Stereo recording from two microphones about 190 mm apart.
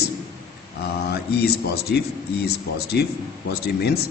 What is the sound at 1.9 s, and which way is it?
A man's voice, 60° left (ahead or behind).